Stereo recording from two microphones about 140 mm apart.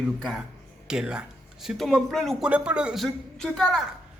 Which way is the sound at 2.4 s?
10° right (ahead or behind).